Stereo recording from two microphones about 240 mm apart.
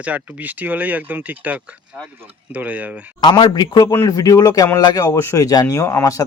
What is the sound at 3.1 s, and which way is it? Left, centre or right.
A man's voice, centre.